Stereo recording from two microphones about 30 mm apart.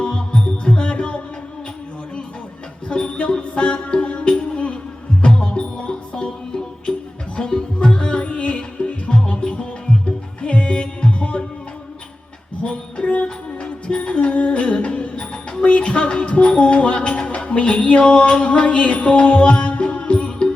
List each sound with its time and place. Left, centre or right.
0.0 s music: left
2.9 s music: left
7.3 s music: left
9.2 s music: left
10.4 s music: left
12.6 s music: left